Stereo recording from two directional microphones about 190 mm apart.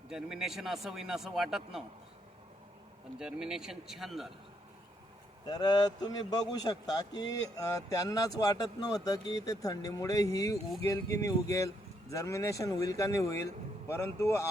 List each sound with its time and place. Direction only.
0.1 s speech: centre (ahead or behind)
3.2 s speech: 5° right (ahead or behind)
5.5 s speech: 20° left (ahead or behind)